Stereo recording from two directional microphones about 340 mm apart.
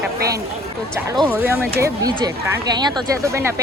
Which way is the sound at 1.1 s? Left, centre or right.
Centre.